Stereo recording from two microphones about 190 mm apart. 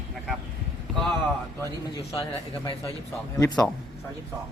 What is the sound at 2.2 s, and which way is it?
Speech, 25° left (ahead or behind).